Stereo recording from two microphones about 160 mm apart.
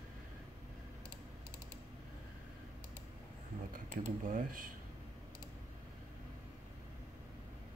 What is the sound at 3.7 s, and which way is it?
Speech, 55° right (ahead or behind).